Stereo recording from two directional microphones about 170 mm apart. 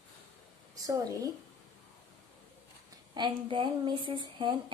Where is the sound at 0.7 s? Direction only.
20° right (ahead or behind).